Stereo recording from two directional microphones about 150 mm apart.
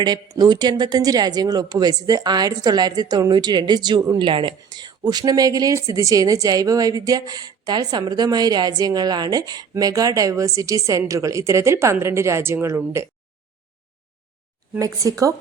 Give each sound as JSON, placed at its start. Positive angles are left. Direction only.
{"t": 0.0, "sound": "speech", "side_deg": -30}
{"t": 14.8, "sound": "speech", "side_deg": -20}